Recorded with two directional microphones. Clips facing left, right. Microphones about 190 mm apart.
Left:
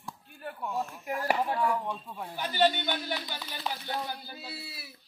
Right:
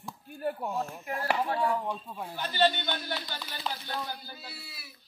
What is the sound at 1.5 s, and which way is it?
Speech, 30° right (ahead or behind).